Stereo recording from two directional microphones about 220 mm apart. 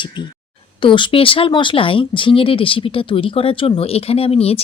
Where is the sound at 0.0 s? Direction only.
20° left (ahead or behind).